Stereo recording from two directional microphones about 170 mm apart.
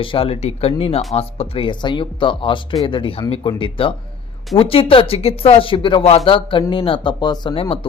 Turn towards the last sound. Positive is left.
turn(degrees=30)  # may be behind; listen again after turning